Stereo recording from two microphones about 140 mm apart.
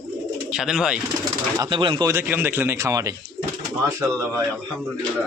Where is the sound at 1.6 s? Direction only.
35° right (ahead or behind).